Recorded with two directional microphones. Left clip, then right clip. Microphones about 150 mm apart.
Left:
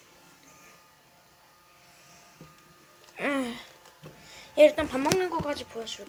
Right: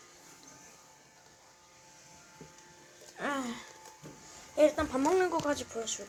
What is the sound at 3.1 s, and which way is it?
Speech, 55° left (ahead or behind).